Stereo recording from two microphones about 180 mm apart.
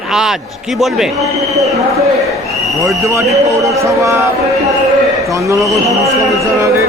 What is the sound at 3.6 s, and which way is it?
Speech, 15° right (ahead or behind).